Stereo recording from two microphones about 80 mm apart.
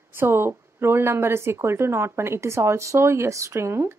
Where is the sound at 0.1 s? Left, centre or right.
Right.